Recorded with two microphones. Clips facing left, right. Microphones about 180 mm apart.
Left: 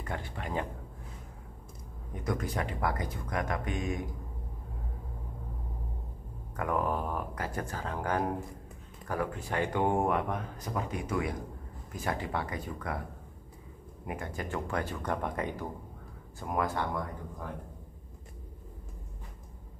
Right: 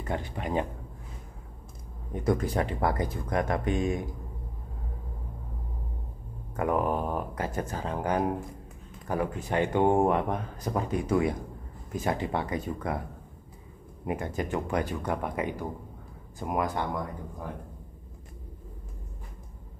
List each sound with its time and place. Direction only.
0.0 s speech: 20° right (ahead or behind)
2.2 s speech: 30° right (ahead or behind)
6.5 s speech: 20° right (ahead or behind)
14.0 s speech: 20° right (ahead or behind)